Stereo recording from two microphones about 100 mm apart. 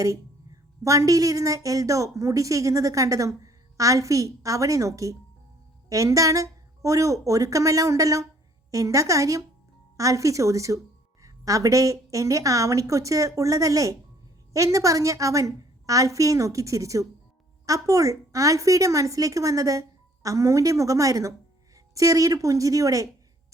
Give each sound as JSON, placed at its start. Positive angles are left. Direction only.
{"t": 0.8, "sound": "a woman's voice", "side_deg": -35}